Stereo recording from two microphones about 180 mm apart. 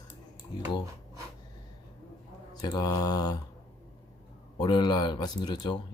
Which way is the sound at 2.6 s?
20° left (ahead or behind).